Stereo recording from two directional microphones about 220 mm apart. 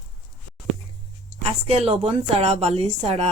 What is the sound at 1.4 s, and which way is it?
A woman's voice, 25° right (ahead or behind).